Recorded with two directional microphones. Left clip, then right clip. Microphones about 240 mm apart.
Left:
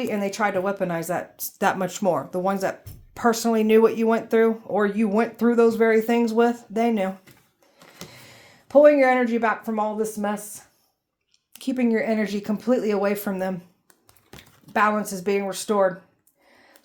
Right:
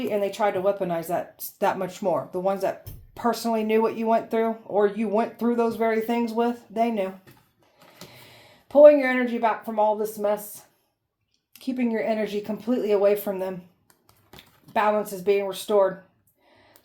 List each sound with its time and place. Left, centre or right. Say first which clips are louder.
0.0 s speech: even; left
8.6 s speech: right 1 dB; left
11.5 s speech: left 4 dB; left
15.0 s speech: right 1 dB; left